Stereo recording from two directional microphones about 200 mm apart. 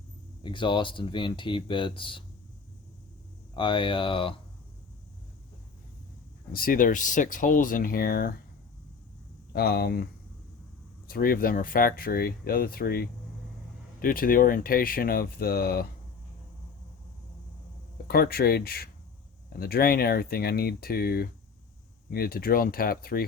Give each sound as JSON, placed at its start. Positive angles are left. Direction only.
{"t": 0.4, "sound": "speech", "side_deg": 25}
{"t": 3.5, "sound": "speech", "side_deg": 25}
{"t": 6.5, "sound": "speech", "side_deg": 45}
{"t": 9.5, "sound": "speech", "side_deg": 50}
{"t": 11.1, "sound": "speech", "side_deg": 45}
{"t": 17.9, "sound": "speech", "side_deg": 50}